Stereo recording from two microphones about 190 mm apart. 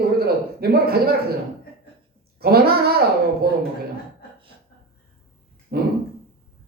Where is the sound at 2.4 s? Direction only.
55° right (ahead or behind).